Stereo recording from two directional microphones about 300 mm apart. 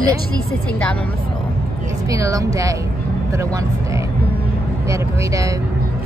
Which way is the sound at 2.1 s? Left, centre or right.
Centre.